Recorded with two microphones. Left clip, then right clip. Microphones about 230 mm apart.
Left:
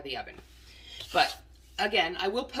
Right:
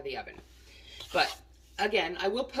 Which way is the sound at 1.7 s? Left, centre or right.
Centre.